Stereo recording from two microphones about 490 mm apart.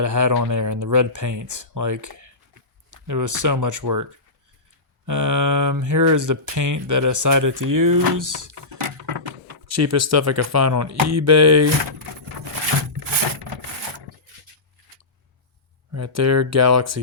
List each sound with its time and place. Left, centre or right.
0.0 s speech: right
5.0 s speech: right
9.6 s speech: right
15.9 s speech: right